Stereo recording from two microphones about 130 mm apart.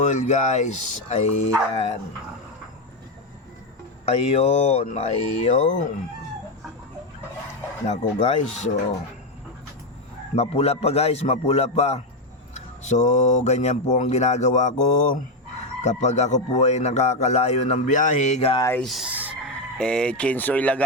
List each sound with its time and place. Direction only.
0.0 s speech: 65° left (ahead or behind)
4.0 s speech: 55° left (ahead or behind); by 5.9 s 70° left (ahead or behind)
7.9 s speech: 60° left (ahead or behind)
10.3 s a man's voice: 50° left (ahead or behind)
18.8 s speech: centre (ahead or behind)